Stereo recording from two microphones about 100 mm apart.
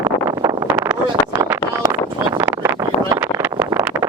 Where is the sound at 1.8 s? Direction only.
45° right (ahead or behind).